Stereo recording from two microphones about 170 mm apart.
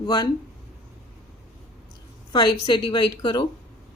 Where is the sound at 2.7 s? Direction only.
25° left (ahead or behind).